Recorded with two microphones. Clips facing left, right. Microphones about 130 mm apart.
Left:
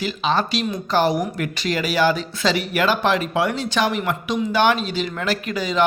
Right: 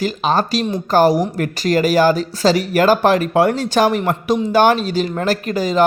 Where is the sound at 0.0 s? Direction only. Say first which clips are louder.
Right 4 dB; 45° right (ahead or behind).